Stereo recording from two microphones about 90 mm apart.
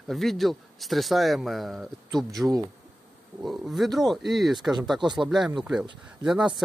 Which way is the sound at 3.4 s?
Centre (ahead or behind).